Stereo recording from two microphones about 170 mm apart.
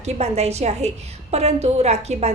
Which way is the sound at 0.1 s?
40° right (ahead or behind).